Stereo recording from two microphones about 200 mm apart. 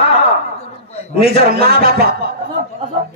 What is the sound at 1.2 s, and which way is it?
A man's voice, 50° right (ahead or behind).